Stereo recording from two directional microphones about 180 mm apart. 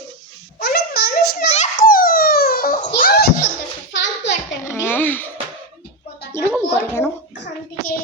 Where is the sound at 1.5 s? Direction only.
45° left (ahead or behind).